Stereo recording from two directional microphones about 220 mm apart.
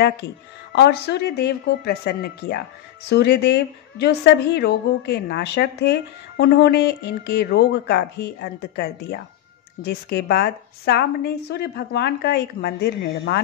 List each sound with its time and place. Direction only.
0.7 s a woman's voice: 50° left (ahead or behind)